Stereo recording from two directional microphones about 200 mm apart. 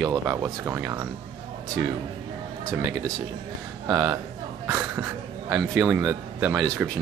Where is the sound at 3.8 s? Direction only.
20° right (ahead or behind).